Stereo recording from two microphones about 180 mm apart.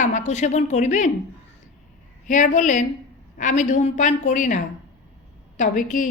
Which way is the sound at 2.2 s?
45° left (ahead or behind).